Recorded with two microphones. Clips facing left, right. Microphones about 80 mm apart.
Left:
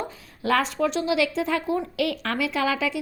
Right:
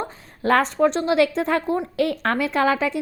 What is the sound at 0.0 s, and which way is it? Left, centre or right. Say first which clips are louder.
A woman's voice: right 4 dB; right.